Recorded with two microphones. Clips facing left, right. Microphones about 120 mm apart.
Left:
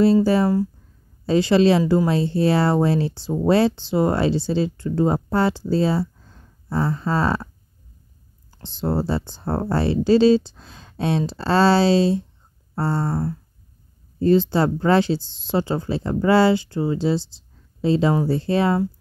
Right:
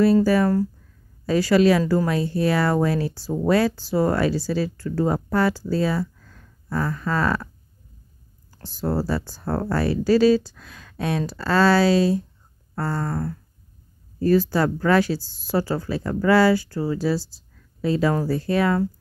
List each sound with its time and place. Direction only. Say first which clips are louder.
0.0 s speech: left 1 dB; 25° left (ahead or behind)
8.6 s speech: left 1 dB; 25° left (ahead or behind)